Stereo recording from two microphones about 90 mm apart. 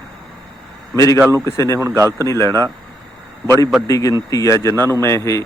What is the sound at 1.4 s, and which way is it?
Speech, 35° left (ahead or behind).